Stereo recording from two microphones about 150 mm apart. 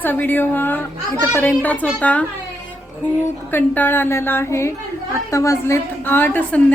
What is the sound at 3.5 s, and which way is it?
A woman's voice, 15° left (ahead or behind).